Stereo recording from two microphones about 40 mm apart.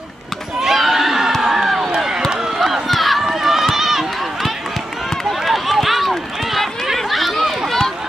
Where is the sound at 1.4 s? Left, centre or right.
Centre.